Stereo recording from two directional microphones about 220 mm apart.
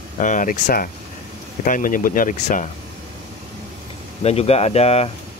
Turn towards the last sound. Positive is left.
turn(degrees=30)  # may be behind; listen again after turning